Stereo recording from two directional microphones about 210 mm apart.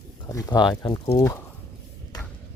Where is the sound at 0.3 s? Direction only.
15° left (ahead or behind).